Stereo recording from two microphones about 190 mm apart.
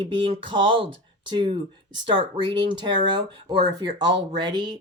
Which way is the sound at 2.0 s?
25° right (ahead or behind).